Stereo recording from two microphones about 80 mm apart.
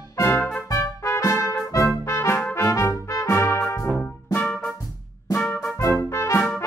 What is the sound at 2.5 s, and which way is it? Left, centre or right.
Trumpet, left.